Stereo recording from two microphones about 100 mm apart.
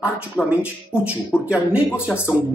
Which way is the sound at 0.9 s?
10° right (ahead or behind).